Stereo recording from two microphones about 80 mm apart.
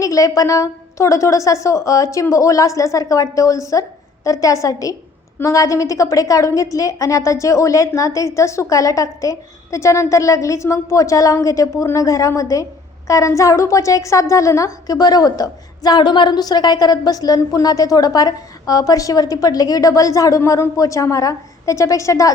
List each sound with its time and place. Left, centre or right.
0.0 s a woman's voice: left